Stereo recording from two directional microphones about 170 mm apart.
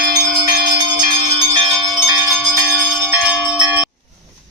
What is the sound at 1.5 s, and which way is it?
Bell, 25° right (ahead or behind).